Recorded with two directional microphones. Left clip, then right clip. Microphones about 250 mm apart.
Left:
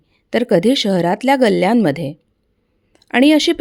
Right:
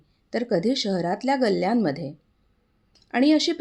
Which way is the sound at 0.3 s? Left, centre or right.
Left.